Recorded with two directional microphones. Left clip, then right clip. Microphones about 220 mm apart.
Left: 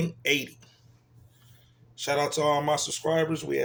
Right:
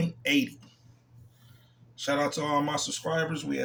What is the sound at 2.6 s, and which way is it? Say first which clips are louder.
Speech: left 4 dB; 50° left (ahead or behind).